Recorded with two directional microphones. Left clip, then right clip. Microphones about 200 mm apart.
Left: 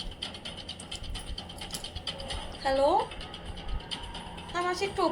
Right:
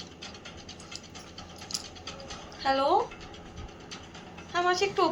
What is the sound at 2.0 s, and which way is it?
Music, 40° left (ahead or behind).